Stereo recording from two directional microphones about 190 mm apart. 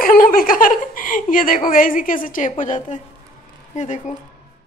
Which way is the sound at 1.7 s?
45° left (ahead or behind).